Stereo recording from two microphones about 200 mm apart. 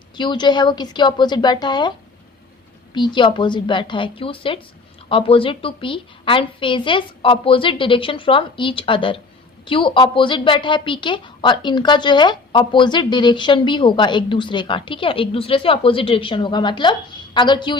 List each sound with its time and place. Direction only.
0.2 s a woman's voice: 20° left (ahead or behind)
2.9 s a woman's voice: 25° left (ahead or behind)